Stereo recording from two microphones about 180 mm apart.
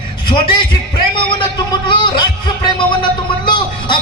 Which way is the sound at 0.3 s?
25° left (ahead or behind).